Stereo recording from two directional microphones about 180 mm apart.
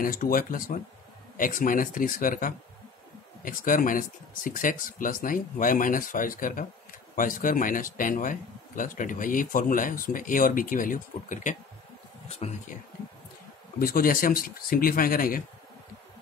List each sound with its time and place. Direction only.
0.0 s speech: 50° left (ahead or behind); by 12.6 s 35° left (ahead or behind)
13.7 s speech: 55° left (ahead or behind)